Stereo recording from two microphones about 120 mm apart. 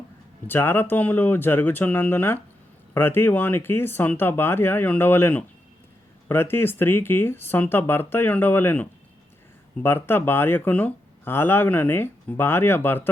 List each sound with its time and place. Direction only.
0.4 s speech: 20° left (ahead or behind)